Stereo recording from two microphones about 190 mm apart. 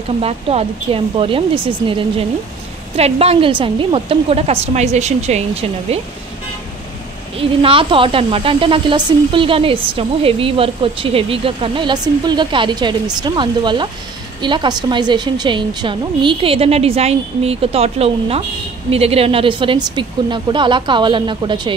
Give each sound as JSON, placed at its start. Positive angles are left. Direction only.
{"t": 0.2, "sound": "a woman's voice", "side_deg": -30}
{"t": 7.3, "sound": "speech", "side_deg": -30}